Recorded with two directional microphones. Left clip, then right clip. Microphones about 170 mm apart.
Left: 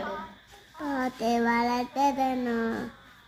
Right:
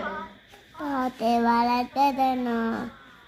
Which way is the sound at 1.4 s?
40° right (ahead or behind).